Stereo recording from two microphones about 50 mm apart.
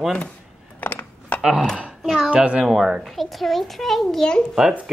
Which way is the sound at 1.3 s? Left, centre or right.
Centre.